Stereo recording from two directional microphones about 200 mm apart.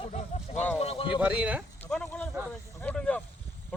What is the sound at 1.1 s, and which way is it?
Speech, 5° right (ahead or behind).